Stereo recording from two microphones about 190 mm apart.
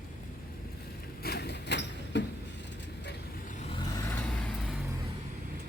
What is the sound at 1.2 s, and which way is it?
Vehicle, 60° left (ahead or behind).